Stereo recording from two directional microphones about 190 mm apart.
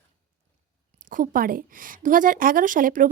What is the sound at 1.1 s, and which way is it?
A woman's voice, 45° right (ahead or behind).